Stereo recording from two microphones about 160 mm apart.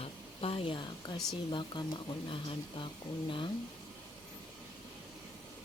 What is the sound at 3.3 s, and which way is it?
Speech, 30° left (ahead or behind).